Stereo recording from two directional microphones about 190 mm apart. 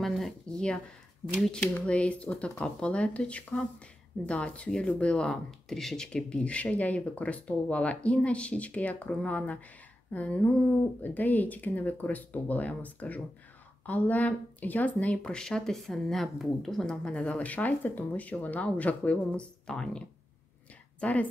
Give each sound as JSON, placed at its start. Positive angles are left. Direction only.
{"t": 0.0, "sound": "speech", "side_deg": 0}
{"t": 21.0, "sound": "speech", "side_deg": 10}